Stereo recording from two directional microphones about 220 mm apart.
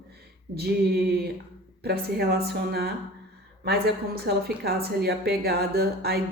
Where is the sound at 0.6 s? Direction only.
45° right (ahead or behind).